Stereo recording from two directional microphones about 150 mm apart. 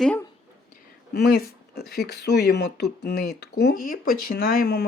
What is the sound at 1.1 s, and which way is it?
Speech, 90° left.